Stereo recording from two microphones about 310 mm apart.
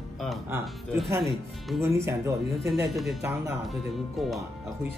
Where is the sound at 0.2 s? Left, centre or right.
Centre.